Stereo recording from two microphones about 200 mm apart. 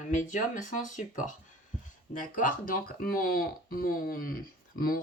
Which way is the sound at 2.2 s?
40° left (ahead or behind).